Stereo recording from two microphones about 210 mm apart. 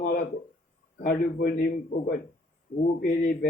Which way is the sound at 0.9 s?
45° left (ahead or behind).